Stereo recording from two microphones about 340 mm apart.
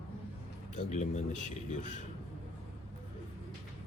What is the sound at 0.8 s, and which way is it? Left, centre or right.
A man's voice, centre.